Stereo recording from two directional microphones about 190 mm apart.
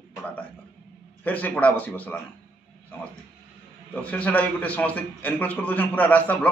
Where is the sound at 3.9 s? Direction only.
5° left (ahead or behind).